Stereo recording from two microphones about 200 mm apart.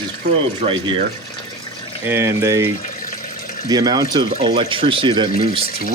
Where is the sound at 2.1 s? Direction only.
15° right (ahead or behind).